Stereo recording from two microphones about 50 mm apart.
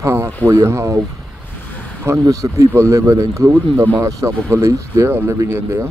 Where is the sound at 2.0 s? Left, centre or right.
Right.